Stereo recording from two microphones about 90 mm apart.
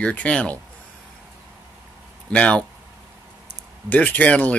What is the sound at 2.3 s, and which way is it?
Speech, 15° left (ahead or behind).